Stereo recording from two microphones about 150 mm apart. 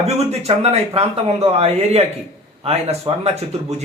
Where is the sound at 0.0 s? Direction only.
45° right (ahead or behind).